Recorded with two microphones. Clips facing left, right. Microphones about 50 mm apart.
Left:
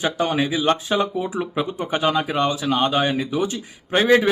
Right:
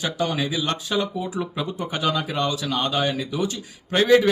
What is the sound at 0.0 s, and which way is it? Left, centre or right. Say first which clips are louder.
Speech: left 4 dB; left.